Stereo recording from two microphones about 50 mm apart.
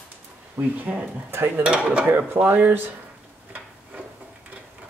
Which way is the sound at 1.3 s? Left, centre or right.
Right.